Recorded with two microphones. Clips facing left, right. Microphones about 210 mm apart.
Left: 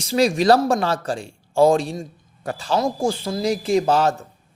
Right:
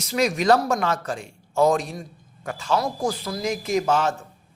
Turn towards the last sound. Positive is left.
turn(degrees=35)  # may be behind; listen again after turning